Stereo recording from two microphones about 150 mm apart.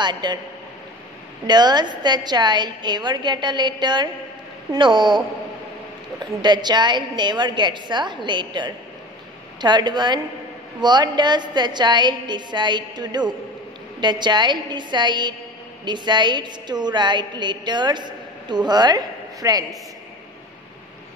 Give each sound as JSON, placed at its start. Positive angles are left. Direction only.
{"t": 0.0, "sound": "a woman's voice", "side_deg": -30}
{"t": 1.5, "sound": "a woman's voice", "side_deg": -30}
{"t": 6.4, "sound": "a woman's voice", "side_deg": -30}